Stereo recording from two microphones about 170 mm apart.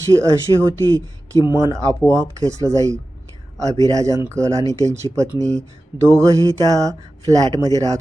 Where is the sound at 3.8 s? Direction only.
20° right (ahead or behind).